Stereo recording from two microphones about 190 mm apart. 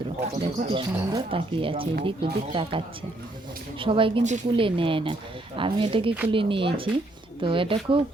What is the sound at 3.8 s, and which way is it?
Speech, 25° right (ahead or behind).